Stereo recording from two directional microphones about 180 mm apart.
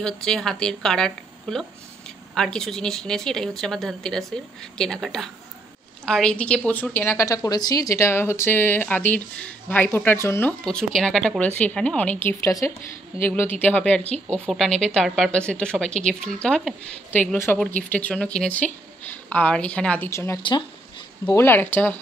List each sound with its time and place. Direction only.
0.0 s a woman's voice: 5° left (ahead or behind)
10.6 s a woman's voice: 5° left (ahead or behind)